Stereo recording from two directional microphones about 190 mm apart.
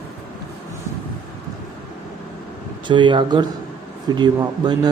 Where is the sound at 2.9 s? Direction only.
25° right (ahead or behind).